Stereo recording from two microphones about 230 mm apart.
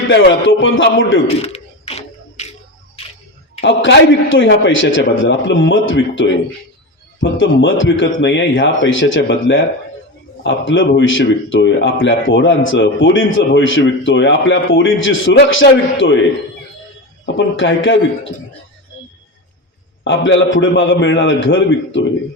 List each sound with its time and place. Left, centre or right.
0.1 s a man's voice: left
1.4 s music: left
3.6 s a man's voice: left
17.2 s a man's voice: left
20.1 s a man's voice: left